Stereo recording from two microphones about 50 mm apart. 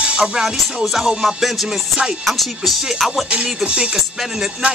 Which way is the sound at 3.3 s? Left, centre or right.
Centre.